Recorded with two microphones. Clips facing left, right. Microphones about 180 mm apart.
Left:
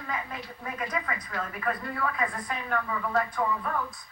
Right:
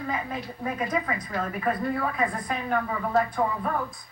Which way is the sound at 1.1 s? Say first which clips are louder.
Right 5 dB; 30° right (ahead or behind).